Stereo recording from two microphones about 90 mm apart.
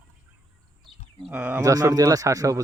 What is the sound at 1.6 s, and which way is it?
Speech, 40° right (ahead or behind).